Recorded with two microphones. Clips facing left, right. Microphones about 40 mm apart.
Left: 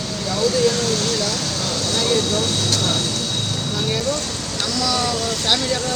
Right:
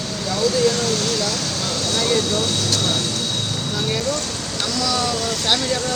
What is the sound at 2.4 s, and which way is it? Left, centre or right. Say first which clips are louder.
Speech: even; left.